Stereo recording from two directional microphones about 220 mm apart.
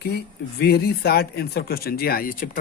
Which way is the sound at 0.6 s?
45° left (ahead or behind).